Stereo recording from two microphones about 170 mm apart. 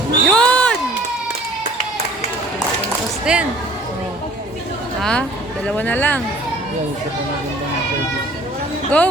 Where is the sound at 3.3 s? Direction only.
5° right (ahead or behind).